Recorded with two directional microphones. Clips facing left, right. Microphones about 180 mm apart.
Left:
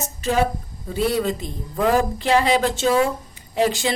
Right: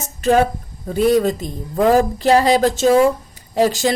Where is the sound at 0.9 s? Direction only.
45° right (ahead or behind).